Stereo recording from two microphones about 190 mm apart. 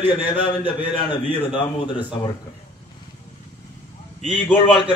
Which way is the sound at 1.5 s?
25° left (ahead or behind).